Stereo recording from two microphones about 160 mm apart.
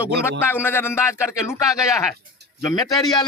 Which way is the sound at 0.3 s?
15° left (ahead or behind).